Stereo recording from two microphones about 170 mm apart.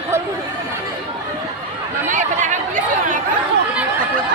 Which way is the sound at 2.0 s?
50° right (ahead or behind).